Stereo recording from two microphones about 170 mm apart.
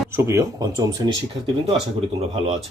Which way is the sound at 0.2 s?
15° right (ahead or behind).